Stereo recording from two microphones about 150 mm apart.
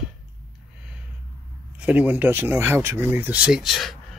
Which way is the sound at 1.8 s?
10° right (ahead or behind).